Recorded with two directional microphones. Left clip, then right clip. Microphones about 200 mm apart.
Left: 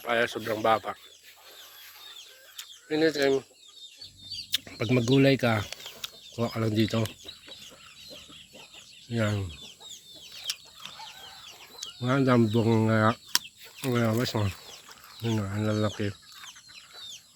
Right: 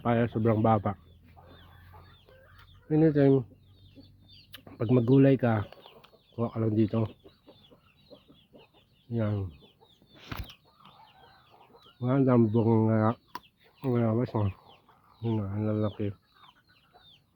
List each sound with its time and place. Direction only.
0.1 s speech: 5° left (ahead or behind)
2.9 s speech: centre (ahead or behind)
4.5 s speech: 10° right (ahead or behind)
5.8 s bird: 5° right (ahead or behind)
9.0 s speech: 5° left (ahead or behind)
10.4 s chicken: centre (ahead or behind)
11.9 s speech: centre (ahead or behind)